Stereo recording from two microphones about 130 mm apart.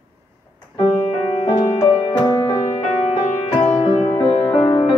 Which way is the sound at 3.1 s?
55° left (ahead or behind).